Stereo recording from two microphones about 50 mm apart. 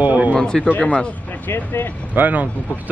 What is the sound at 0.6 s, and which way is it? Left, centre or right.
Speech, left.